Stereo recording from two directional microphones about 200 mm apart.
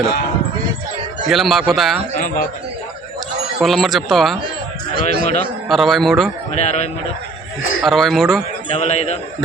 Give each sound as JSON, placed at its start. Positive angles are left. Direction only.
{"t": 1.3, "sound": "speech", "side_deg": 0}
{"t": 2.1, "sound": "a man's voice", "side_deg": 40}
{"t": 3.6, "sound": "speech", "side_deg": 0}
{"t": 5.0, "sound": "a man's voice", "side_deg": 35}
{"t": 5.6, "sound": "speech", "side_deg": 0}
{"t": 6.6, "sound": "a man's voice", "side_deg": 35}
{"t": 7.8, "sound": "speech", "side_deg": 0}
{"t": 8.7, "sound": "a man's voice", "side_deg": 35}